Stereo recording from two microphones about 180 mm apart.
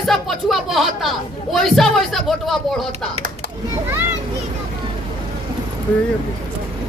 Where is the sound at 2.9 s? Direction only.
40° right (ahead or behind).